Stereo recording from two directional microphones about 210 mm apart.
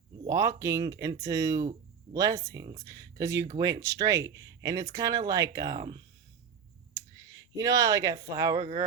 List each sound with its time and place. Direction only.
0.3 s speech: 15° right (ahead or behind)
7.5 s speech: 15° right (ahead or behind)